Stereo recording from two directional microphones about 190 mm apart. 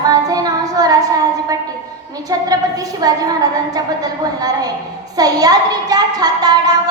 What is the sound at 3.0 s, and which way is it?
A child's voice, 20° right (ahead or behind).